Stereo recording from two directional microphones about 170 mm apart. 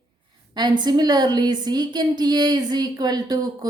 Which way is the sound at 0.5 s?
25° right (ahead or behind).